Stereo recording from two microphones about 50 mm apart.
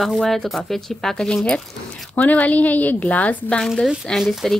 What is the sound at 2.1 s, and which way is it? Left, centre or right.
Speech, left.